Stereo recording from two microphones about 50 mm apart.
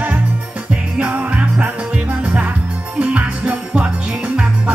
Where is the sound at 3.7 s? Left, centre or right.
Right.